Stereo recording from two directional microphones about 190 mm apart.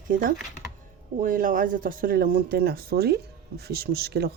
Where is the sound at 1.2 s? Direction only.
45° right (ahead or behind).